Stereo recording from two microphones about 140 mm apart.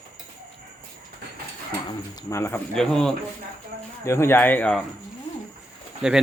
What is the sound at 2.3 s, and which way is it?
Speech, 20° left (ahead or behind).